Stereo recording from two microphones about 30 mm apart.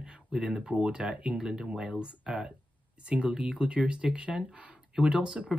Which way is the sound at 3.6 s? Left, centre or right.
Right.